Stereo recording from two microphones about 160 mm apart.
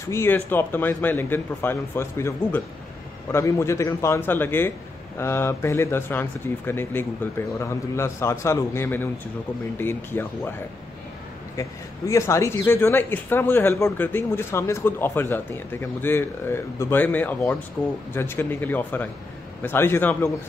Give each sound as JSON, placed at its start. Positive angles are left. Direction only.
{"t": 0.1, "sound": "a man's voice", "side_deg": 15}
{"t": 12.1, "sound": "a man's voice", "side_deg": 20}